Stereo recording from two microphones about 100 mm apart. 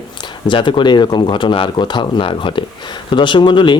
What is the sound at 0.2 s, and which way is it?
Speech, 55° left (ahead or behind).